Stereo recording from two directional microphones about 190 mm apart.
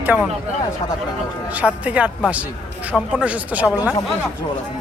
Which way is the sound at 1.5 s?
5° right (ahead or behind).